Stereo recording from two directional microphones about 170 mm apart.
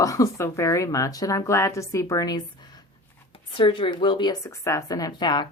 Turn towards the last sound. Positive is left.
turn(degrees=25)  # may be behind; listen again after turning